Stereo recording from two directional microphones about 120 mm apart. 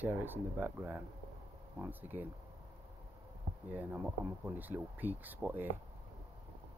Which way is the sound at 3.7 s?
15° right (ahead or behind).